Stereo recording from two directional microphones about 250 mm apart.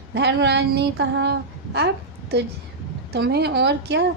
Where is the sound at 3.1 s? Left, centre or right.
Right.